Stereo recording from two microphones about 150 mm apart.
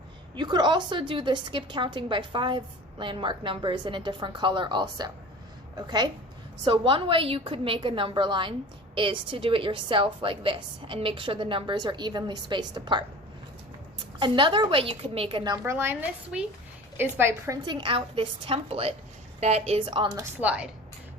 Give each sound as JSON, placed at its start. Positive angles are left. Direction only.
{"t": 0.3, "sound": "a woman's voice", "side_deg": -30}
{"t": 14.2, "sound": "a woman's voice", "side_deg": -35}
{"t": 17.7, "sound": "a woman's voice", "side_deg": -30}
{"t": 20.4, "sound": "a woman's voice", "side_deg": -5}